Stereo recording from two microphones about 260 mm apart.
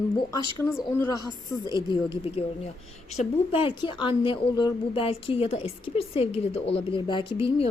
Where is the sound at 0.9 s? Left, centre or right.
Centre.